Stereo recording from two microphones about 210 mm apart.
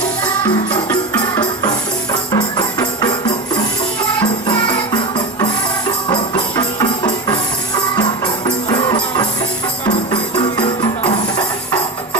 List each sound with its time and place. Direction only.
2.3 s music: 20° left (ahead or behind)